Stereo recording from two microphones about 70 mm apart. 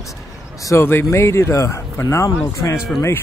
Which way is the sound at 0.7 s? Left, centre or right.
Left.